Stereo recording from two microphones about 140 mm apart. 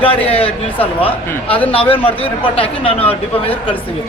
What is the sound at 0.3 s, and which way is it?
A man's voice, 45° left (ahead or behind).